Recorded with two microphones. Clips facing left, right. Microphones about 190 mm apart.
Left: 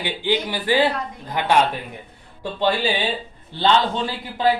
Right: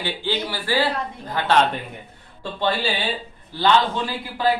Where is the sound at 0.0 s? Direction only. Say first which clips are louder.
Left 3 dB; 15° left (ahead or behind).